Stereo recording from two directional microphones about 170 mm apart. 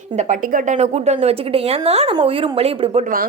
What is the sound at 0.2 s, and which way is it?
A woman's voice, 50° right (ahead or behind).